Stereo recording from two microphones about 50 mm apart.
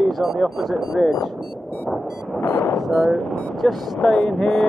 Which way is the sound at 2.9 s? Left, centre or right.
Centre.